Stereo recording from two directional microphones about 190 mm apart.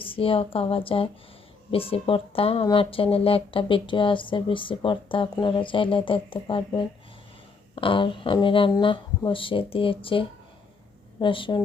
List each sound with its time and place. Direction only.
0.0 s speech: 30° left (ahead or behind)